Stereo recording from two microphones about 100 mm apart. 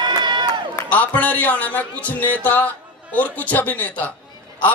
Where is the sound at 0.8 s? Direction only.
15° left (ahead or behind).